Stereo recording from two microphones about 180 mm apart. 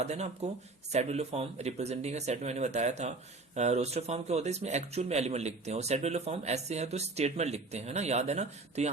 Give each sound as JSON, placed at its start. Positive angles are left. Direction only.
{"t": 0.0, "sound": "a man's voice", "side_deg": -35}